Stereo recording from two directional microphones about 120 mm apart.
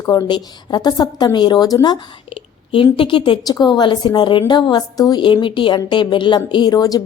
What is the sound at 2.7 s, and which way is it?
A woman's voice, 45° left (ahead or behind).